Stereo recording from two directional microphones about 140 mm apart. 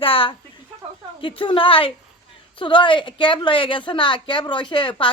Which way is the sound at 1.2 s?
35° left (ahead or behind).